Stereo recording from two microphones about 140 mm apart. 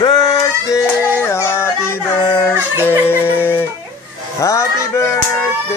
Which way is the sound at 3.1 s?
15° left (ahead or behind).